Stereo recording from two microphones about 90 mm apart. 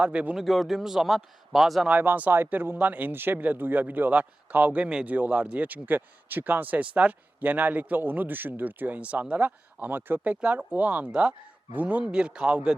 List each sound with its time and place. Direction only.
0.0 s speech: 15° right (ahead or behind)
0.3 s a man's voice: centre (ahead or behind)
1.9 s a man's voice: 20° right (ahead or behind)